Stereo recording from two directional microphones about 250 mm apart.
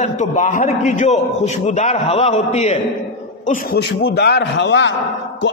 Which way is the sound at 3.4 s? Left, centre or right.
Left.